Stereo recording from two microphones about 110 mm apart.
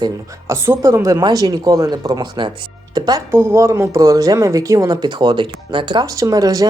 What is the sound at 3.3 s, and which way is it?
Speech, 25° right (ahead or behind).